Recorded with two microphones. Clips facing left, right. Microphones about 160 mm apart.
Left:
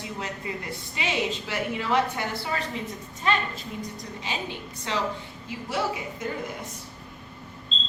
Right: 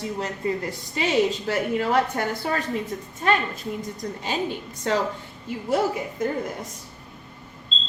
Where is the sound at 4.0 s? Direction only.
45° right (ahead or behind).